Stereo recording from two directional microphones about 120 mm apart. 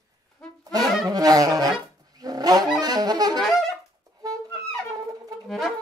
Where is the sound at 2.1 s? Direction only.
30° right (ahead or behind).